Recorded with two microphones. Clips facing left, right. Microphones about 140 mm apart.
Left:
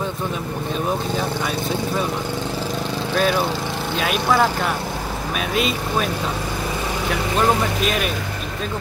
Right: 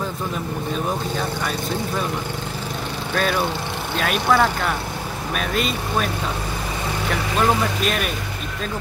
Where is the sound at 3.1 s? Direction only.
Centre (ahead or behind).